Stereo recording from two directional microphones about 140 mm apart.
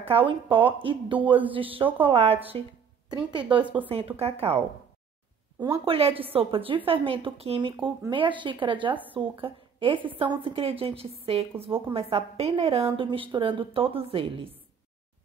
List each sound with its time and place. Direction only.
0.0 s a woman's voice: 40° right (ahead or behind)
3.1 s a woman's voice: 30° right (ahead or behind)
3.9 s a woman's voice: 45° right (ahead or behind)
5.9 s a woman's voice: 45° right (ahead or behind)